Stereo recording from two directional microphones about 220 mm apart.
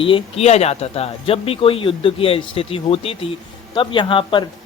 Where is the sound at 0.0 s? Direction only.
25° left (ahead or behind).